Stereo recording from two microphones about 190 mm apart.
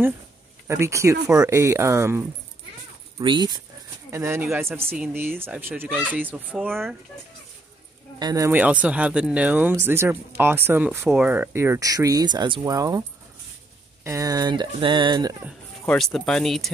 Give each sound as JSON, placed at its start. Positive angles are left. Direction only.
{"t": 0.7, "sound": "speech", "side_deg": -15}
{"t": 8.2, "sound": "speech", "side_deg": -20}
{"t": 14.0, "sound": "speech", "side_deg": -15}
{"t": 15.8, "sound": "speech", "side_deg": 5}